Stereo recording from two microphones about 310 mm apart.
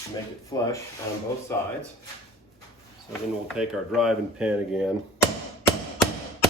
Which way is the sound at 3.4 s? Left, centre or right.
Centre.